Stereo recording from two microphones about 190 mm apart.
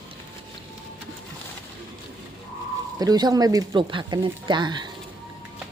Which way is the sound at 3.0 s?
20° right (ahead or behind).